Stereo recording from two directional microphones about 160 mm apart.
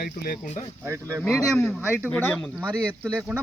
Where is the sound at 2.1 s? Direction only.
10° left (ahead or behind).